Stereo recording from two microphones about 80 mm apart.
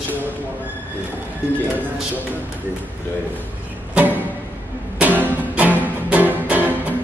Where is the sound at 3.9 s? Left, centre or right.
Right.